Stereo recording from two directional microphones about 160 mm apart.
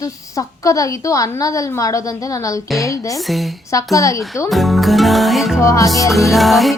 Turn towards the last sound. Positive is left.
turn(degrees=0)  # may be behind; listen again after turning